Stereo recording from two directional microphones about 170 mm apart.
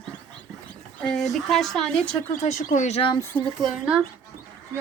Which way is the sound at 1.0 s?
5° left (ahead or behind).